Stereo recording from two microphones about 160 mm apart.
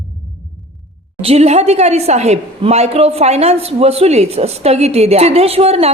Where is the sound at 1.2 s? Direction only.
40° right (ahead or behind).